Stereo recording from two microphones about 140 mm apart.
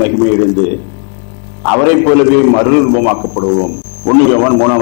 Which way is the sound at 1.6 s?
15° left (ahead or behind).